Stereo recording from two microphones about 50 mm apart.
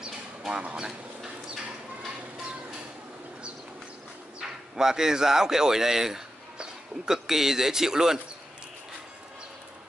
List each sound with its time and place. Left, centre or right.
0.0 s a sound: centre
0.8 s bird: centre
4.4 s speech: centre